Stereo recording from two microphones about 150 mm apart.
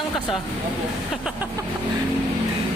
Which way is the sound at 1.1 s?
5° right (ahead or behind).